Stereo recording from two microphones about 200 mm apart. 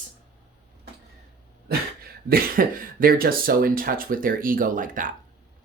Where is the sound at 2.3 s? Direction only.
45° right (ahead or behind).